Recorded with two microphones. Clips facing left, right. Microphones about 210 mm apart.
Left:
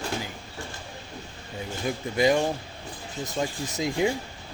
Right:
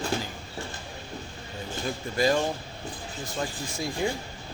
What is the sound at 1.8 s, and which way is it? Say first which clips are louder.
Speech: left 3 dB; 15° left (ahead or behind).